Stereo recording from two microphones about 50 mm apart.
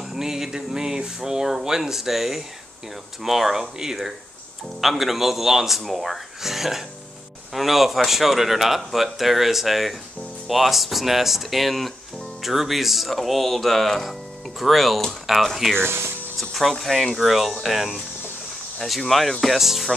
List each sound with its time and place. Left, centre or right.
0.0 s a man's voice: centre
15.8 s speech: right
16.3 s a man's voice: centre